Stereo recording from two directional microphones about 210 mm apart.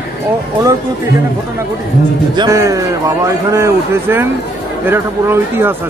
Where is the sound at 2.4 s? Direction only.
15° right (ahead or behind).